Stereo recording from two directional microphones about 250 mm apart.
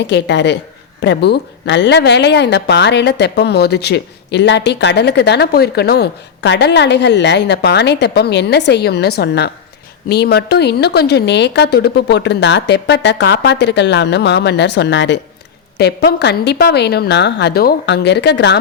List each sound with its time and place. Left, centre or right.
0.0 s a woman's voice: left